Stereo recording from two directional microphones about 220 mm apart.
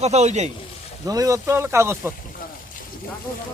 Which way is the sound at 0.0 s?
30° right (ahead or behind).